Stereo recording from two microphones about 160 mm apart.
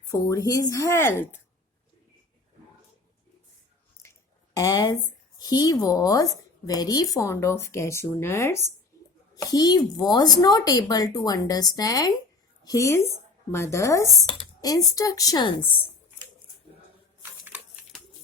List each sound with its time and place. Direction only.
0.1 s a woman's voice: 20° left (ahead or behind)
4.5 s a woman's voice: 25° left (ahead or behind)
8.9 s a sound: 20° left (ahead or behind)
9.3 s a woman's voice: 25° left (ahead or behind)